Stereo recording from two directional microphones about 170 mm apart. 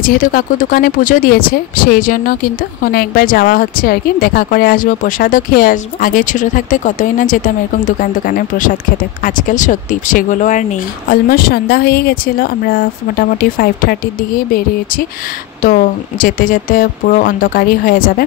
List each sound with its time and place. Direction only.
0.0 s a woman's voice: 55° left (ahead or behind)
15.6 s speech: 55° left (ahead or behind)